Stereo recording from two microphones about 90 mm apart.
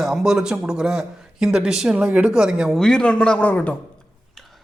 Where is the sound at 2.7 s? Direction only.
10° left (ahead or behind).